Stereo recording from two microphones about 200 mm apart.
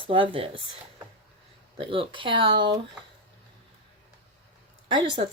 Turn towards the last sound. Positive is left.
turn(degrees=-25)  # may be behind; listen again after turning